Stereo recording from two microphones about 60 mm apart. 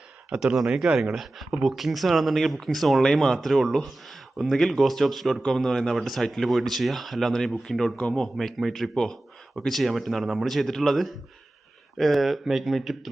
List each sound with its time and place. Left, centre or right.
0.3 s speech: centre
7.9 s speech: centre
8.4 s speech: centre